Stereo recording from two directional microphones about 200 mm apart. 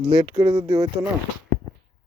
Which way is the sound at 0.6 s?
20° right (ahead or behind).